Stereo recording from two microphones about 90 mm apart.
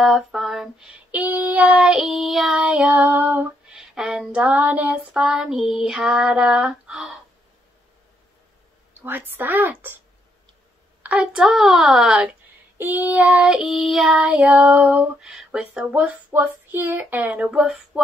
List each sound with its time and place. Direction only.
0.0 s a sound: centre (ahead or behind)
1.1 s child singing: 20° right (ahead or behind); by 2.6 s centre (ahead or behind)
2.6 s child singing: 15° right (ahead or behind)
3.7 s female singing: 10° right (ahead or behind)
4.6 s speech: 20° right (ahead or behind)
5.2 s a sound: 5° right (ahead or behind)
5.9 s child singing: 10° right (ahead or behind)
9.0 s speech: 20° right (ahead or behind)
11.0 s child singing: 15° right (ahead or behind)
12.7 s child singing: 20° right (ahead or behind); by 14.1 s 5° right (ahead or behind)
14.1 s child singing: 15° right (ahead or behind)
15.0 s a sound: 5° right (ahead or behind)
15.7 s child singing: 10° right (ahead or behind)